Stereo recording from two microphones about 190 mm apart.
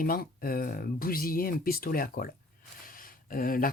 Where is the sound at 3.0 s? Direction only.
50° left (ahead or behind).